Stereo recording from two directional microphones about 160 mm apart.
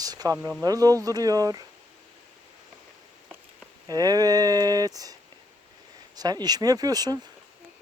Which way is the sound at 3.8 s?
25° right (ahead or behind).